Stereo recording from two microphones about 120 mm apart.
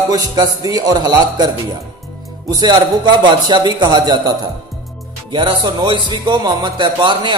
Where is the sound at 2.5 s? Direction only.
35° right (ahead or behind).